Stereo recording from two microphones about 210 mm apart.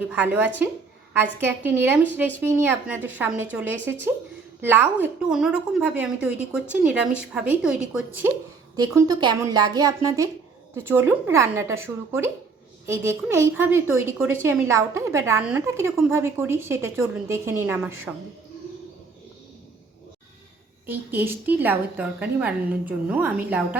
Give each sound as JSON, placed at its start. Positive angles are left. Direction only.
{"t": 0.1, "sound": "a woman's voice", "side_deg": -10}
{"t": 20.8, "sound": "a woman's voice", "side_deg": -10}